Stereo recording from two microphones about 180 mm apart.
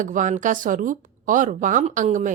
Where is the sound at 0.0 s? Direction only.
45° right (ahead or behind).